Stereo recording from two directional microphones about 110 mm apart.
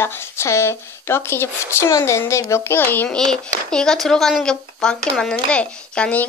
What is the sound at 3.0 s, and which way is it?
A child's voice, 5° left (ahead or behind).